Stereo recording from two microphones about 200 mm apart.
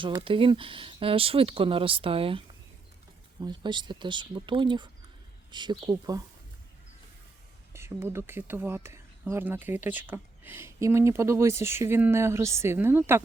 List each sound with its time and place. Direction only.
0.0 s speech: 25° right (ahead or behind)
3.4 s speech: 20° right (ahead or behind)
7.7 s speech: 15° right (ahead or behind)